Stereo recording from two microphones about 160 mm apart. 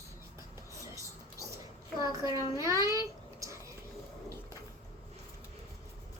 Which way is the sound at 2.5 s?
20° right (ahead or behind).